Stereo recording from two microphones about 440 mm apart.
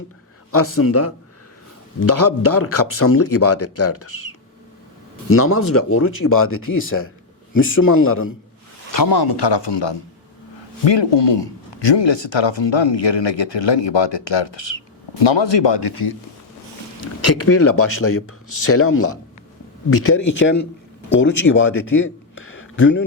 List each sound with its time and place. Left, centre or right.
0.5 s speech: left
5.3 s speech: left
8.9 s speech: left
17.0 s speech: left